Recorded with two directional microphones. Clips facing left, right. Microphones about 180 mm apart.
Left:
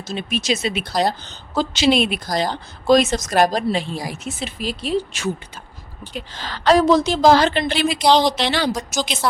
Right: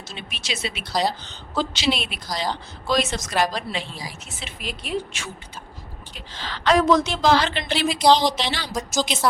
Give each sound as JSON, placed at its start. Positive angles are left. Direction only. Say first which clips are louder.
{"t": 0.1, "sound": "a woman's voice", "louder": "left 12 dB", "side_deg": 45}
{"t": 6.3, "sound": "a woman's voice", "louder": "left 4 dB", "side_deg": 45}
{"t": 7.8, "sound": "a woman's voice", "louder": "left 1 dB", "side_deg": 65}